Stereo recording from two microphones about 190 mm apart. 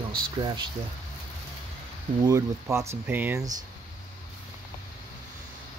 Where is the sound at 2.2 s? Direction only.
15° right (ahead or behind).